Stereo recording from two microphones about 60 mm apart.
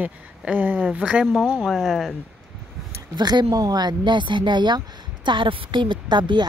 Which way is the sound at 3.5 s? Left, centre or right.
Right.